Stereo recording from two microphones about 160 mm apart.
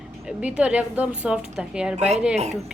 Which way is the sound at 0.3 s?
5° right (ahead or behind).